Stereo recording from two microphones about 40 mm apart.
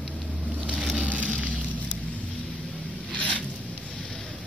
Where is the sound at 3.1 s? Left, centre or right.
Left.